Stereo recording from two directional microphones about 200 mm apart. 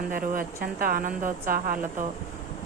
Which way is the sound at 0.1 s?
45° right (ahead or behind).